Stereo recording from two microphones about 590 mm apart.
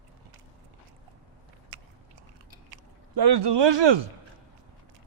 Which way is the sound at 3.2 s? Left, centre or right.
Right.